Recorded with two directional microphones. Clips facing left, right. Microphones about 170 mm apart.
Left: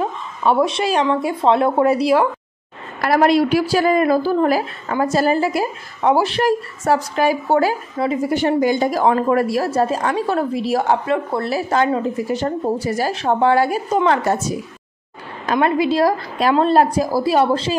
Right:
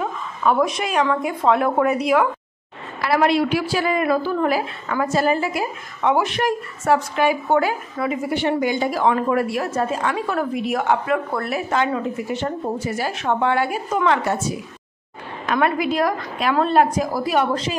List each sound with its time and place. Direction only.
0.4 s a woman's voice: 30° left (ahead or behind)
3.0 s a woman's voice: 45° left (ahead or behind)
15.4 s a woman's voice: 30° left (ahead or behind)